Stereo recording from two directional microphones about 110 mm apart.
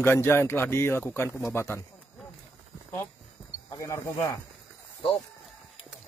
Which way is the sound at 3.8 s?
30° left (ahead or behind).